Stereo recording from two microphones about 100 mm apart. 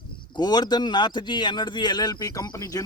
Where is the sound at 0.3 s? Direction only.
45° left (ahead or behind).